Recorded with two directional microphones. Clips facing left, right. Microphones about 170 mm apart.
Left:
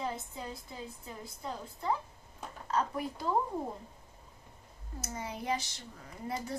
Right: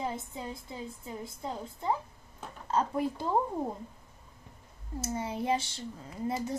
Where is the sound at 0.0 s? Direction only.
25° right (ahead or behind).